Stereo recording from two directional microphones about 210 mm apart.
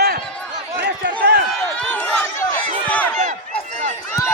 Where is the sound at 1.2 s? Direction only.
50° right (ahead or behind).